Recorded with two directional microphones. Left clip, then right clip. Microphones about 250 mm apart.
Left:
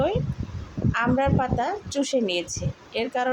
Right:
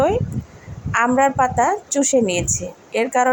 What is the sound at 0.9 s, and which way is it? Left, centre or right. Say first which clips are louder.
A woman's voice: right 8 dB; centre.